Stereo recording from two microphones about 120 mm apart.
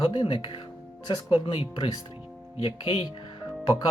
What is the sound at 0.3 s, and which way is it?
Speech, 35° left (ahead or behind).